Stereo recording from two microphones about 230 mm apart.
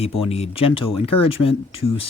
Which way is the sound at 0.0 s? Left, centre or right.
Left.